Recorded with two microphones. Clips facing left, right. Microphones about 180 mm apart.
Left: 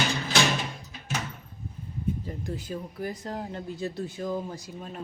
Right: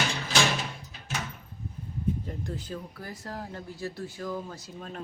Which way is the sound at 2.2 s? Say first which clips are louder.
Left 2 dB; 10° left (ahead or behind).